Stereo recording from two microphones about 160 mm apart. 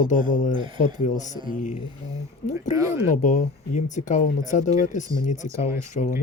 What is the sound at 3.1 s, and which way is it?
Speech, 50° left (ahead or behind).